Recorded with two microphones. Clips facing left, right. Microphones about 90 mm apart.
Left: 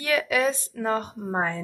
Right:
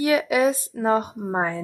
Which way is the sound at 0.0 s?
20° right (ahead or behind).